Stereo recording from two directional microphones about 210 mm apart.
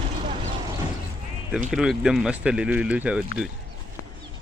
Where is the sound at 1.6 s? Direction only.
Centre (ahead or behind).